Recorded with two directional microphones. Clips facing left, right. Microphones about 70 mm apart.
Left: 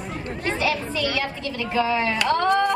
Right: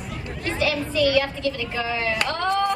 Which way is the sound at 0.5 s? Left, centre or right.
Left.